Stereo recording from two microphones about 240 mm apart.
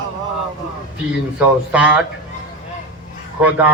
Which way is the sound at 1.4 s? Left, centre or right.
Centre.